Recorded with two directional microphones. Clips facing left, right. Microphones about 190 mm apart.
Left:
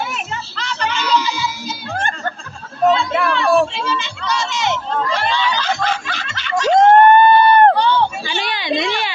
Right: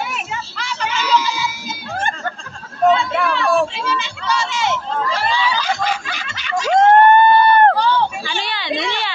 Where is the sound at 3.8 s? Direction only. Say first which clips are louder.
Even; 5° right (ahead or behind).